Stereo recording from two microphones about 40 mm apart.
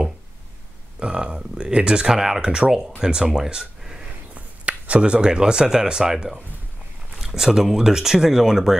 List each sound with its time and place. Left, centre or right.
0.9 s speech: right
2.1 s speech: centre
2.4 s speech: right
4.6 s speech: right; by 8.7 s centre